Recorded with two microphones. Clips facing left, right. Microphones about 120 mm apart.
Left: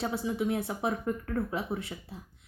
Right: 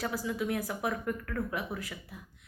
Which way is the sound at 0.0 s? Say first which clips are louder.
Left 3 dB; 25° left (ahead or behind).